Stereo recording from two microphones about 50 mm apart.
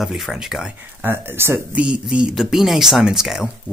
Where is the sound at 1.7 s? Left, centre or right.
Right.